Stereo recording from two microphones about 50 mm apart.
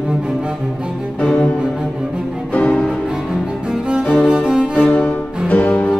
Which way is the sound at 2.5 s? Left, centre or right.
Left.